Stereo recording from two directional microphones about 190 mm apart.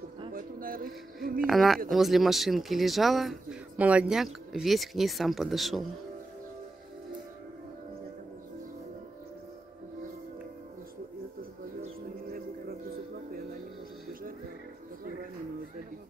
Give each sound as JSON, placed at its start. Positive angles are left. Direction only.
{"t": 0.3, "sound": "a sound", "side_deg": -50}
{"t": 1.4, "sound": "speech", "side_deg": 0}
{"t": 11.8, "sound": "music", "side_deg": -50}